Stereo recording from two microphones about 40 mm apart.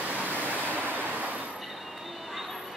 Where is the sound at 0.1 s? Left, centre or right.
Right.